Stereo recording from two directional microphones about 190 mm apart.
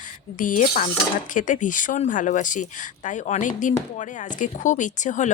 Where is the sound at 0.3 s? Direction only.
45° left (ahead or behind).